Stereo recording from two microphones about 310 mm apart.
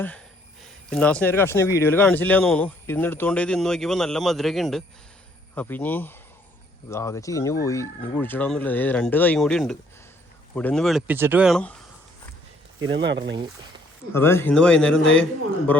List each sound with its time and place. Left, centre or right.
0.6 s speech: centre
12.8 s speech: right
13.3 s speech: centre
14.1 s speech: centre